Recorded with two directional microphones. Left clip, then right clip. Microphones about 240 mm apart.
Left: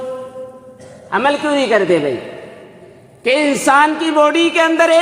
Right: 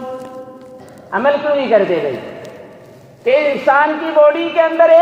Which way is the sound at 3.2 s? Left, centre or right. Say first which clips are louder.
Right 1 dB; left.